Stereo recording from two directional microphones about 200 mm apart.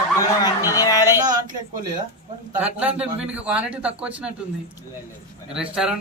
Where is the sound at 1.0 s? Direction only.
15° right (ahead or behind).